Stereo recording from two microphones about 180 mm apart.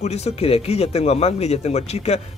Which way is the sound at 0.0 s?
35° left (ahead or behind).